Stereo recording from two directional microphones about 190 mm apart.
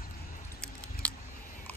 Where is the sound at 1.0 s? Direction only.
10° left (ahead or behind).